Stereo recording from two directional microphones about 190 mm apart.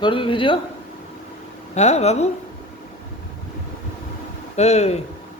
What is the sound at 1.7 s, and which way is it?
Speech, 35° left (ahead or behind).